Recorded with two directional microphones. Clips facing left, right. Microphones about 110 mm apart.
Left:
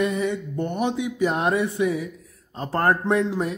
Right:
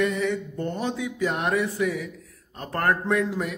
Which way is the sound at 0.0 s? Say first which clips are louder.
Left 1 dB; 25° left (ahead or behind).